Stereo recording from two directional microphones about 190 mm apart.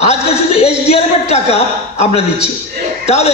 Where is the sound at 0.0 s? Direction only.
35° left (ahead or behind).